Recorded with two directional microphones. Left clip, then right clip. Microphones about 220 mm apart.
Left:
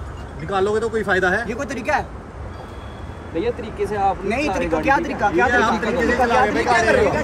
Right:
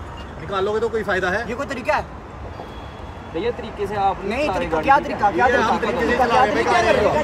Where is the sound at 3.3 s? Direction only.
20° right (ahead or behind).